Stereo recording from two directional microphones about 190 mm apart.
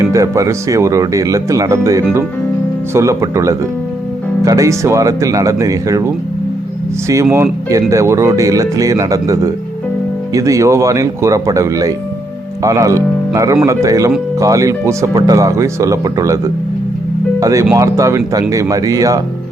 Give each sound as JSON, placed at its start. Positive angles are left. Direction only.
{"t": 0.0, "sound": "speech", "side_deg": -15}
{"t": 7.1, "sound": "speech", "side_deg": -15}
{"t": 17.4, "sound": "speech", "side_deg": -15}